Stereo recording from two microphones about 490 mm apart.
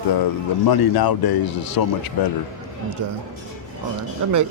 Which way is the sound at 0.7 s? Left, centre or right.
Left.